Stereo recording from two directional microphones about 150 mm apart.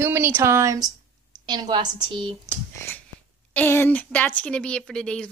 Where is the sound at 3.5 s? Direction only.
15° left (ahead or behind).